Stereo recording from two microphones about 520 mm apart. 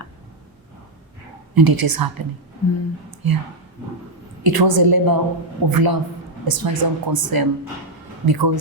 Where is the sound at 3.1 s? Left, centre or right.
Right.